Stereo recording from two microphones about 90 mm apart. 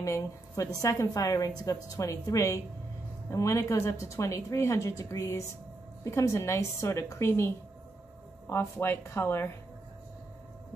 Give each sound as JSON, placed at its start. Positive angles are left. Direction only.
{"t": 0.0, "sound": "a woman's voice", "side_deg": 35}